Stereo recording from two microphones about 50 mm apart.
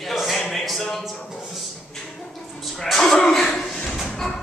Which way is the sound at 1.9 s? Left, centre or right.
Centre.